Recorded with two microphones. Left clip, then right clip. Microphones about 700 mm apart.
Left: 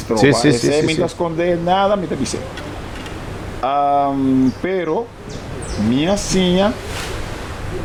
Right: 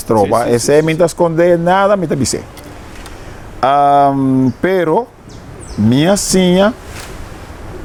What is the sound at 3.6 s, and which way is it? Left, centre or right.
A man's voice, right.